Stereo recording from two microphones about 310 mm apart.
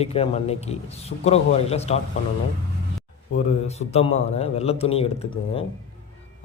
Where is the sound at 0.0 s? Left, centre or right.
Centre.